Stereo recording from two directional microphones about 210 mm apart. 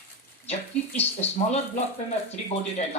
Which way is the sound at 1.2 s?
30° left (ahead or behind).